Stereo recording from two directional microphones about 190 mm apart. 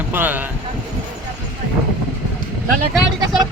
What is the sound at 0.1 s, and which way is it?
Speech, 10° right (ahead or behind).